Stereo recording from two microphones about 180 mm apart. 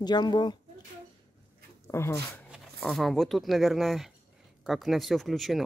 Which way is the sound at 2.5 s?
Centre (ahead or behind).